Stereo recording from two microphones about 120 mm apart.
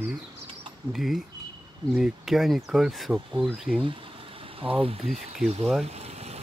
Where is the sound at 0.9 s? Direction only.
Centre (ahead or behind).